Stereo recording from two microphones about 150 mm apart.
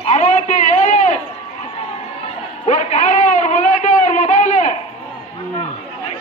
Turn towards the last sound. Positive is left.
turn(degrees=50)  # may be behind; listen again after turning